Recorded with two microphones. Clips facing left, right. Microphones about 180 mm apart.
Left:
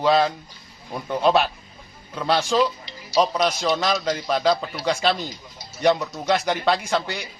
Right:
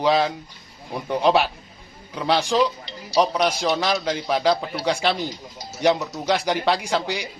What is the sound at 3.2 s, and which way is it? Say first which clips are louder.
A man's voice: even; 10° right (ahead or behind).